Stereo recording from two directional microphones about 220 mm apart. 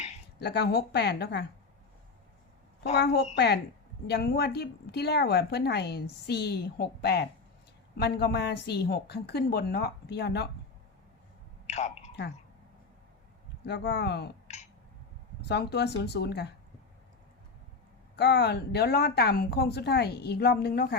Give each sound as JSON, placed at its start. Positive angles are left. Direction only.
{"t": 0.3, "sound": "a woman's voice", "side_deg": 50}
{"t": 3.3, "sound": "a woman's voice", "side_deg": 50}
{"t": 11.6, "sound": "a sound", "side_deg": 30}
{"t": 13.7, "sound": "a woman's voice", "side_deg": 50}
{"t": 14.4, "sound": "a sound", "side_deg": 30}
{"t": 15.4, "sound": "a woman's voice", "side_deg": 50}
{"t": 18.2, "sound": "a woman's voice", "side_deg": 50}